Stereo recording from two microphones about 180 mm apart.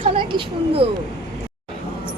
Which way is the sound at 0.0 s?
30° right (ahead or behind).